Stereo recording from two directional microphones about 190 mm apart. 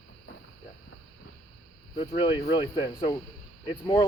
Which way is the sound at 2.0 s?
25° left (ahead or behind).